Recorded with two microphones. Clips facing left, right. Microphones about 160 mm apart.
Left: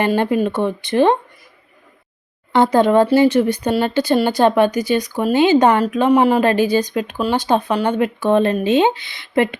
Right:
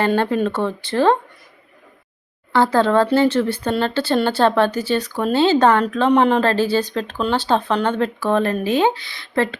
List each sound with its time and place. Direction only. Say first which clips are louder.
0.1 s speech: left 2 dB; 10° left (ahead or behind)
2.5 s speech: left 3 dB; 20° left (ahead or behind)